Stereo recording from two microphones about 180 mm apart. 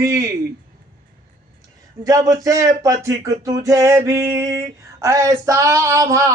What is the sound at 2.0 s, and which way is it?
Speech, 20° right (ahead or behind).